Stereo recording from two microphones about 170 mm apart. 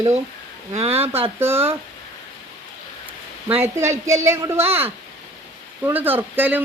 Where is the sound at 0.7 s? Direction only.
35° right (ahead or behind).